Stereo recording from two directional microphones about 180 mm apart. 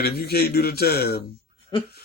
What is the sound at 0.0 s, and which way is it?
A man's voice, 60° left (ahead or behind).